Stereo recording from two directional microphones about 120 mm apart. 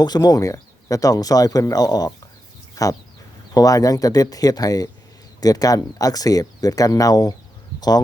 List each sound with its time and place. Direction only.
0.0 s speech: 35° left (ahead or behind)